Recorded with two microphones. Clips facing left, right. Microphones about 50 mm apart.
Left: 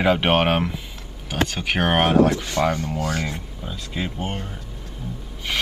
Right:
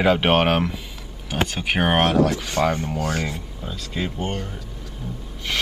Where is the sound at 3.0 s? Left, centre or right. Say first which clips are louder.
Right 1 dB; right.